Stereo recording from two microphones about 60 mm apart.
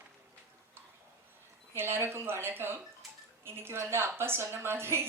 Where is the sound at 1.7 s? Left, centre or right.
Right.